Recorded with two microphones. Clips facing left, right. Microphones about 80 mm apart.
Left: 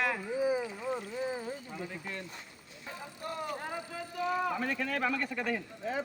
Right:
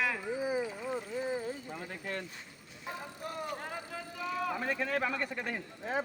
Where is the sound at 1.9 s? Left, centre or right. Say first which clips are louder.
Right 2 dB; right.